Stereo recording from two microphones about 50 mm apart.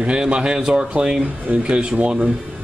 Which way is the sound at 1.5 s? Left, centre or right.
Right.